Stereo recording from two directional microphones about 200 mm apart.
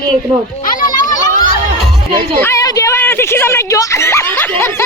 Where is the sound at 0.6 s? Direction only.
45° left (ahead or behind).